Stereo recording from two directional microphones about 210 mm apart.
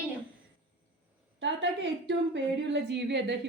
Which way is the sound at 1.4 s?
60° right (ahead or behind).